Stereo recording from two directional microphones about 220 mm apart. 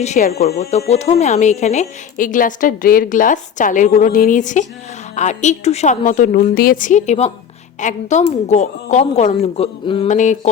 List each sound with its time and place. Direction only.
0.0 s a woman's voice: 30° left (ahead or behind)